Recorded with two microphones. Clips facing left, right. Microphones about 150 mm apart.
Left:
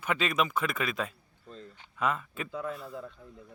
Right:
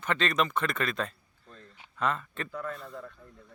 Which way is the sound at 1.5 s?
20° left (ahead or behind).